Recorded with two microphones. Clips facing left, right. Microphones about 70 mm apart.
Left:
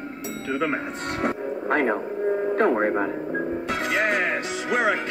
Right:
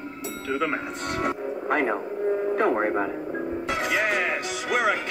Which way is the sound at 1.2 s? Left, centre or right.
Left.